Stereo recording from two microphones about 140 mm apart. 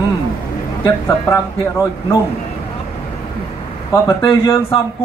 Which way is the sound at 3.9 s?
20° left (ahead or behind).